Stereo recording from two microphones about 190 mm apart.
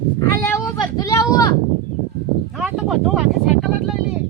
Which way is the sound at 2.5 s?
Centre (ahead or behind).